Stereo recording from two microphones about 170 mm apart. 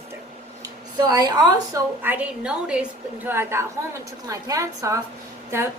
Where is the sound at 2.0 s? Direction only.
10° right (ahead or behind).